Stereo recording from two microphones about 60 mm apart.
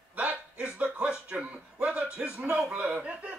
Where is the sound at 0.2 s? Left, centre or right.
Right.